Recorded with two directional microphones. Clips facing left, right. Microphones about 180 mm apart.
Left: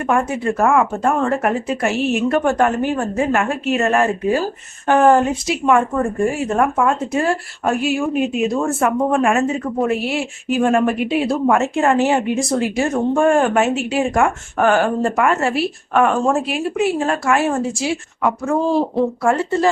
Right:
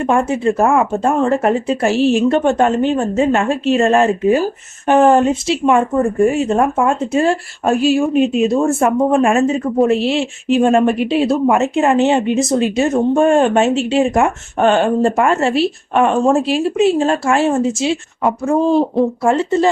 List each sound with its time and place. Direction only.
0.1 s speech: 25° right (ahead or behind)